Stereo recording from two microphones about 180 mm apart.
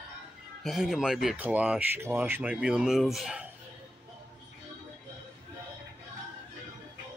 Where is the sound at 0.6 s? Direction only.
Centre (ahead or behind).